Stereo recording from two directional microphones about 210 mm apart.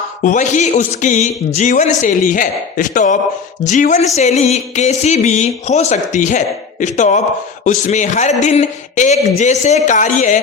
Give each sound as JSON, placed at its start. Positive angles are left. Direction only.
{"t": 0.2, "sound": "a man's voice", "side_deg": 35}